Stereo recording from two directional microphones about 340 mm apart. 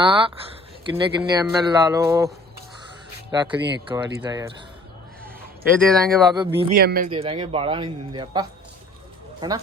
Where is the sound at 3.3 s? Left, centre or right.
Centre.